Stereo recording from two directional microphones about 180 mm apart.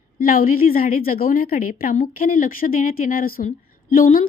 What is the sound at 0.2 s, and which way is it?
A woman's voice, 50° left (ahead or behind).